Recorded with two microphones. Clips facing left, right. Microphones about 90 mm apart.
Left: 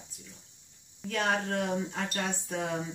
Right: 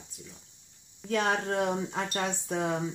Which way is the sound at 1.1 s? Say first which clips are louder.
Right 2 dB; 30° right (ahead or behind).